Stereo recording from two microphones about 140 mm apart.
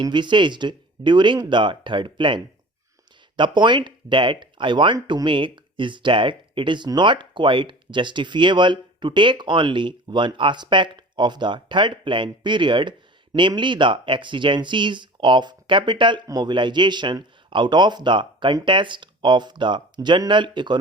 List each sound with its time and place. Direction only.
0.0 s speech: 35° right (ahead or behind)